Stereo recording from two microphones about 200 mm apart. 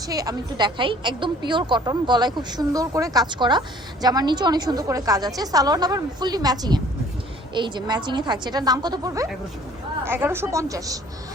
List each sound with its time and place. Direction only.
0.0 s a woman's voice: 20° right (ahead or behind)